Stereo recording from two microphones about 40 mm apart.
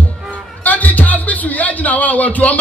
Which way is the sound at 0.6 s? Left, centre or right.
Left.